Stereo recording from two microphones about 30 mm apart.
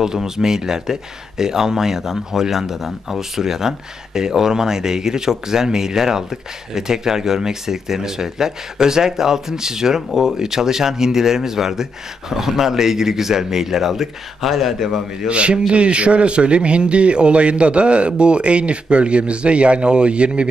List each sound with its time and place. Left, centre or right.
0.0 s speech: centre
15.2 s a man's voice: right